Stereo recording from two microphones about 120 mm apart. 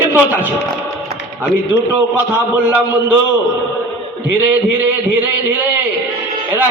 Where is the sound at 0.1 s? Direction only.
15° right (ahead or behind).